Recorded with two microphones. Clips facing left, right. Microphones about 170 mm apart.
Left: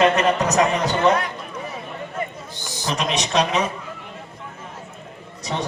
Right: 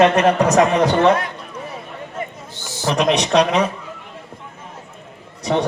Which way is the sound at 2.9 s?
60° right (ahead or behind).